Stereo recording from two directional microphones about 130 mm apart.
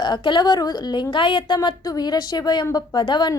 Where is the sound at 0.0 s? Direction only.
35° left (ahead or behind).